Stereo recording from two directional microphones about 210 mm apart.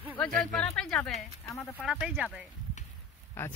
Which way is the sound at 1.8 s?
5° right (ahead or behind).